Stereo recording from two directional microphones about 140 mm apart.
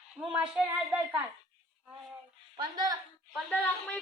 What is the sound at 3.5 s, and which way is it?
Speech, 10° left (ahead or behind).